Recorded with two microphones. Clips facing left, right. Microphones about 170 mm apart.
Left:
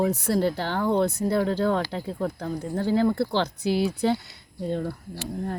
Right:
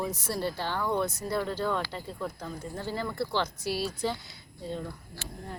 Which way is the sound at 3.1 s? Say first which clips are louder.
Left 9 dB; 50° left (ahead or behind).